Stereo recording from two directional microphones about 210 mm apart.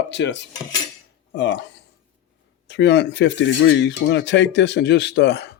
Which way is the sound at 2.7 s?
55° left (ahead or behind).